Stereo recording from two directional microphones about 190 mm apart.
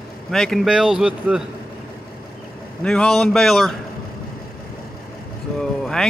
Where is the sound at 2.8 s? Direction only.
5° left (ahead or behind).